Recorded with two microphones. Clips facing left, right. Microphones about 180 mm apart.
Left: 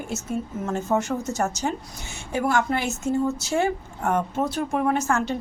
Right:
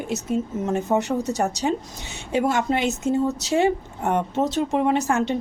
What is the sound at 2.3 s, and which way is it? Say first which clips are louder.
Speech: right 2 dB; 20° right (ahead or behind).